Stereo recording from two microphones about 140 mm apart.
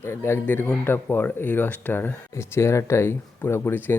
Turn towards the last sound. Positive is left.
turn(degrees=15)  # may be behind; listen again after turning